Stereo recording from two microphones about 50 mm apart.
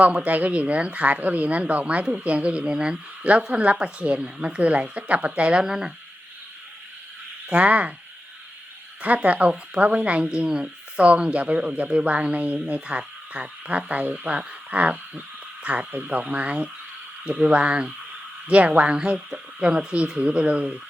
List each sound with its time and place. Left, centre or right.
0.0 s speech: right
5.6 s speech: centre
7.5 s speech: right
9.0 s speech: right